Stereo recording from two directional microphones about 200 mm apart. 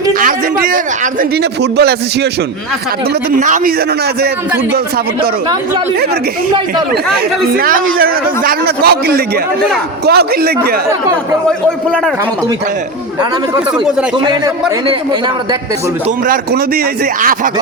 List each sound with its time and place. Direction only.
0.1 s a man's voice: 45° right (ahead or behind)
3.4 s a man's voice: 40° right (ahead or behind)
7.5 s a man's voice: 45° right (ahead or behind)
11.4 s a man's voice: 5° left (ahead or behind)
16.2 s a man's voice: 45° right (ahead or behind)